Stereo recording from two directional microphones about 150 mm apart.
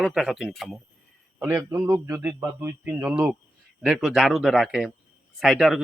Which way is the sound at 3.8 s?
5° right (ahead or behind).